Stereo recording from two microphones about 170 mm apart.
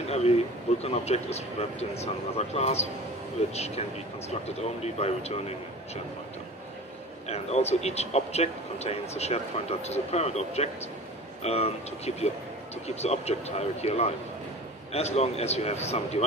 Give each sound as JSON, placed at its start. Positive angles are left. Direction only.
{"t": 0.8, "sound": "speech", "side_deg": 40}
{"t": 7.2, "sound": "speech", "side_deg": 40}